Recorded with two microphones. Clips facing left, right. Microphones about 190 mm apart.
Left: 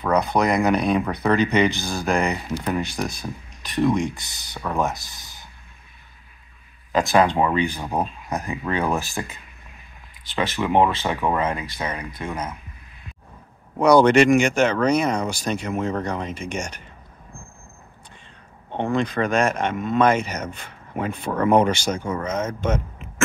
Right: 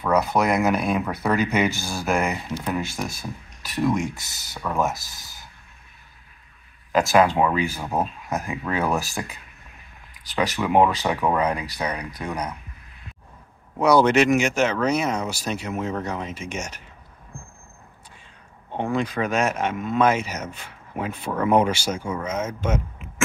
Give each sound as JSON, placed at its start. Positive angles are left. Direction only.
{"t": 0.0, "sound": "speech", "side_deg": -5}
{"t": 6.9, "sound": "speech", "side_deg": -5}
{"t": 10.3, "sound": "speech", "side_deg": -40}
{"t": 10.6, "sound": "speech", "side_deg": 0}
{"t": 13.7, "sound": "speech", "side_deg": -5}
{"t": 18.7, "sound": "speech", "side_deg": -10}